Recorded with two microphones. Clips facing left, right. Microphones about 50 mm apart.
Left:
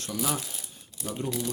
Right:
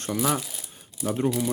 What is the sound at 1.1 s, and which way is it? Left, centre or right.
Speech, right.